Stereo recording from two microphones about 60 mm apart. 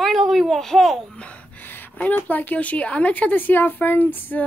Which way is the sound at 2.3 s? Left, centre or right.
Left.